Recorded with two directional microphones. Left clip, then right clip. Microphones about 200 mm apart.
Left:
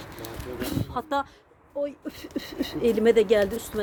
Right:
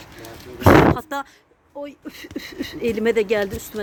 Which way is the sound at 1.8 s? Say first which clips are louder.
Left 3 dB; 25° right (ahead or behind).